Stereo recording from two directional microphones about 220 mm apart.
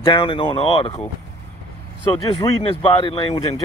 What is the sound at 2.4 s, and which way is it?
Speech, 25° left (ahead or behind).